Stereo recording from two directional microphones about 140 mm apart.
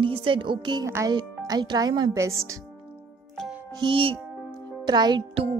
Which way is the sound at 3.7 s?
35° right (ahead or behind).